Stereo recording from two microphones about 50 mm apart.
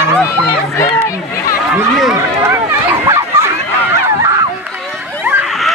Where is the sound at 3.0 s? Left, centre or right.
Right.